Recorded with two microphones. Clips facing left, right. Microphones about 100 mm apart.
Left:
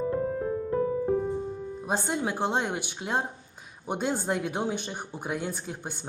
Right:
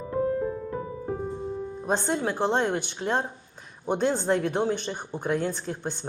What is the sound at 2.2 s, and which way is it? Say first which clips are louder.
A woman's voice: right 3 dB; 10° left (ahead or behind).